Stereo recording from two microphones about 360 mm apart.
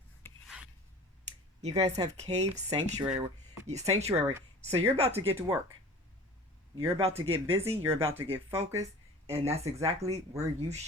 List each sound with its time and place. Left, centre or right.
0.2 s filing: centre
1.6 s speech: centre
6.8 s speech: centre